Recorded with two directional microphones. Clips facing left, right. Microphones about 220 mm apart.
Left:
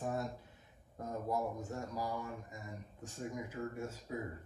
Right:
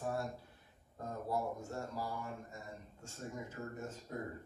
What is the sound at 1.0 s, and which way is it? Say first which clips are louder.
Speech: left 1 dB; 15° left (ahead or behind).